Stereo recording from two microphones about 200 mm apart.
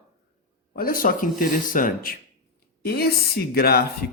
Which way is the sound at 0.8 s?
45° left (ahead or behind).